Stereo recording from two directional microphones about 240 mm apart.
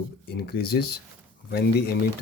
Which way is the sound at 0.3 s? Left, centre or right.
Left.